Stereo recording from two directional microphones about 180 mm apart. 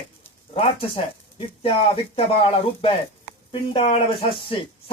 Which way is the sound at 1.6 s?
30° left (ahead or behind).